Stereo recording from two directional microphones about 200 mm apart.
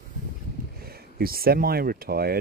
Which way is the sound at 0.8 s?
50° right (ahead or behind).